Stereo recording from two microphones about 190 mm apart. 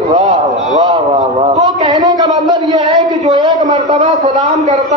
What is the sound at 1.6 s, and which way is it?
A man's voice, 20° right (ahead or behind).